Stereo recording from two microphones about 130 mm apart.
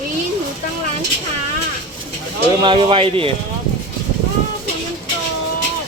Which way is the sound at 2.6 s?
40° right (ahead or behind).